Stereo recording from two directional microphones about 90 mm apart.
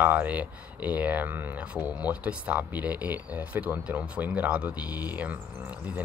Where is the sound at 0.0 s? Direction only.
20° right (ahead or behind).